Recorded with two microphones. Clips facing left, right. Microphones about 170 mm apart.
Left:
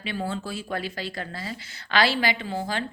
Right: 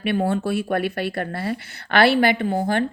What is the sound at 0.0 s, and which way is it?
Speech, 60° right (ahead or behind).